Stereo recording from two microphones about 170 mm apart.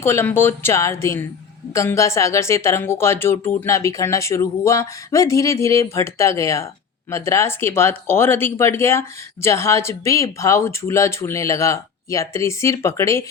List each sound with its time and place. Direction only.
0.0 s speech: 15° left (ahead or behind)